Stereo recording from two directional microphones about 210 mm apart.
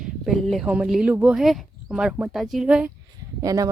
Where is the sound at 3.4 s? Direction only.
15° right (ahead or behind).